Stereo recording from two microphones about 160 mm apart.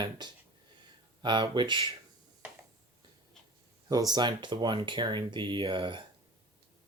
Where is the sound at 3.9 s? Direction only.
25° right (ahead or behind).